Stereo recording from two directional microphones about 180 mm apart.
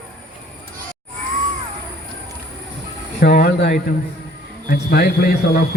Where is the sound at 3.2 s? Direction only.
65° left (ahead or behind).